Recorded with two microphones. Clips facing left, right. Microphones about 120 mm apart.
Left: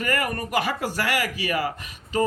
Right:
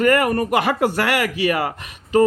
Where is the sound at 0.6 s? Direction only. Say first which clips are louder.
Right 7 dB; 65° right (ahead or behind).